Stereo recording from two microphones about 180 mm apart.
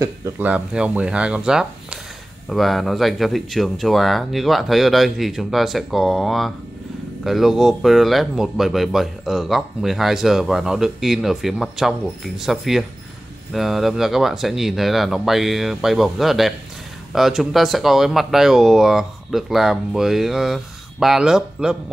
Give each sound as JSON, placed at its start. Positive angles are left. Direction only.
{"t": 0.0, "sound": "speech", "side_deg": -15}